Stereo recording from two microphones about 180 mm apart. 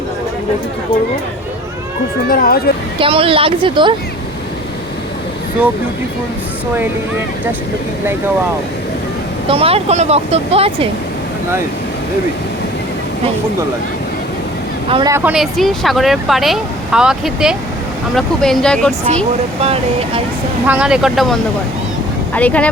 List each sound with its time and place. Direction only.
2.3 s speech: 55° left (ahead or behind)
3.0 s speech: 30° right (ahead or behind)
9.5 s speech: 30° right (ahead or behind)
14.8 s speech: 30° right (ahead or behind)
15.1 s speech: 10° right (ahead or behind)
19.6 s speech: 35° right (ahead or behind)
20.7 s speech: 5° right (ahead or behind)
22.4 s speech: 10° left (ahead or behind)